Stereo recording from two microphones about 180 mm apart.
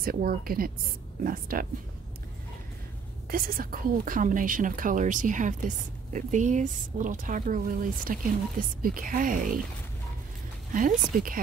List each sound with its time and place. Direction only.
0.0 s speech: 55° right (ahead or behind)
3.3 s speech: 55° right (ahead or behind)
11.1 s speech: 50° right (ahead or behind)